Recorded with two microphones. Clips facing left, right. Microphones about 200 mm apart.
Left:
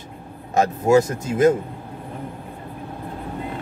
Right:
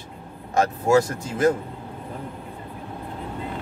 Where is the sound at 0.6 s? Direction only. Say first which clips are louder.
Left 3 dB; 25° left (ahead or behind).